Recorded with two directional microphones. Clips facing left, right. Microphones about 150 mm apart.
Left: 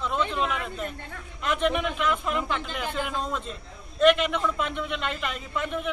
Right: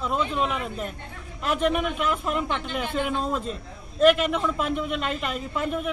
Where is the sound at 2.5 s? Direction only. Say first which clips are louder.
Right 2 dB; 45° right (ahead or behind).